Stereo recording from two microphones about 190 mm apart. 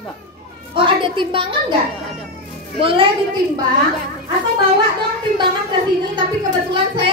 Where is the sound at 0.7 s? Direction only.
25° right (ahead or behind).